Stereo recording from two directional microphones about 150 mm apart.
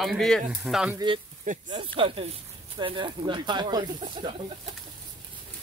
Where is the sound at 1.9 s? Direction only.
35° right (ahead or behind).